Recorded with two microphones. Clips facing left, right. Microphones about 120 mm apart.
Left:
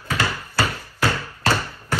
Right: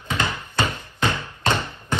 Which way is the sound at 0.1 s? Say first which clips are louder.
Left 1 dB; 20° right (ahead or behind).